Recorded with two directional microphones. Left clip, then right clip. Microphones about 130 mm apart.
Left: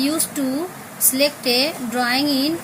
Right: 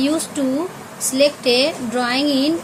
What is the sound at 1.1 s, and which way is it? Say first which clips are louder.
Speech: right 4 dB; 35° right (ahead or behind).